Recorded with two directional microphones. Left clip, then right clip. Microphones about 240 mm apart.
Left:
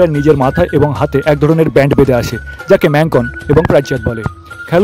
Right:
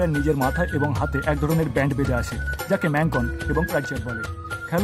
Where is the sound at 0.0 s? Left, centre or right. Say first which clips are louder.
Left 12 dB; left.